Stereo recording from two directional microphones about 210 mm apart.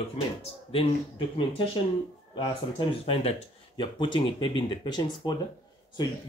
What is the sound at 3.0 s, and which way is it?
Speech, 30° left (ahead or behind).